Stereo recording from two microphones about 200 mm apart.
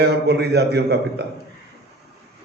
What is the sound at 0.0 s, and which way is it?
Speech, 55° right (ahead or behind).